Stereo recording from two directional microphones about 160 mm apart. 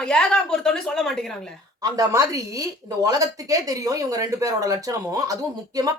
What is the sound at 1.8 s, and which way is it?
Speech, 20° right (ahead or behind).